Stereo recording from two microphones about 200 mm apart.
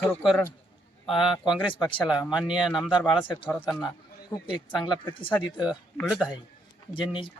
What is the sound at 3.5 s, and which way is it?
Speech, 5° left (ahead or behind).